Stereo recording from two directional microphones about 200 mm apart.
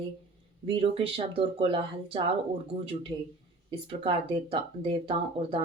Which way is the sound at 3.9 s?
25° right (ahead or behind).